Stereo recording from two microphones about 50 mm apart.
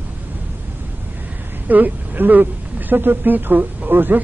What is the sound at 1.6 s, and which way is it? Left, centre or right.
Speech, right.